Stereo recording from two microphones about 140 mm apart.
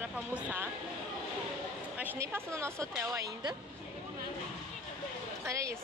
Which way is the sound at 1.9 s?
10° right (ahead or behind).